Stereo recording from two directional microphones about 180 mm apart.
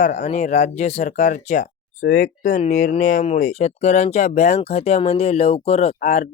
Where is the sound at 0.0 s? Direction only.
40° left (ahead or behind).